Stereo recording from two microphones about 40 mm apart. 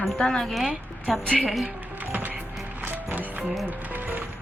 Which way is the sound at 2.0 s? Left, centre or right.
Right.